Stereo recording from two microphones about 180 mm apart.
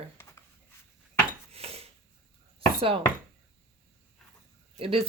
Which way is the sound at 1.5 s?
35° right (ahead or behind).